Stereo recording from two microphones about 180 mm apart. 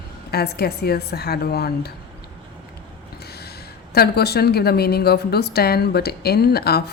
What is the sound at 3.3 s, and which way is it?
Gasp, 60° left (ahead or behind).